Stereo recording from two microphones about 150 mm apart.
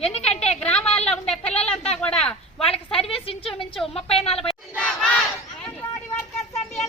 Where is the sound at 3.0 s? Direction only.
40° left (ahead or behind).